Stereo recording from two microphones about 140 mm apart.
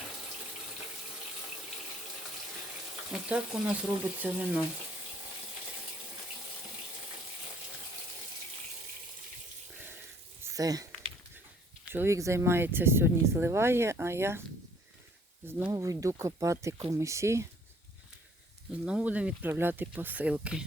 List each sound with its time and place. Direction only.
3.1 s speech: 5° right (ahead or behind)
10.4 s a sound: 25° right (ahead or behind)
11.9 s speech: 15° right (ahead or behind)
15.4 s speech: 15° right (ahead or behind)
15.7 s speech: 25° right (ahead or behind)
18.7 s speech: 10° right (ahead or behind)